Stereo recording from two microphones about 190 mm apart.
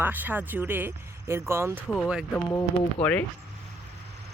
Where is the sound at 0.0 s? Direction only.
10° right (ahead or behind).